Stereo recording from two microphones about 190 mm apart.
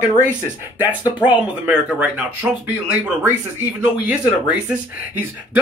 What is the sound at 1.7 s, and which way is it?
Speech, 5° right (ahead or behind).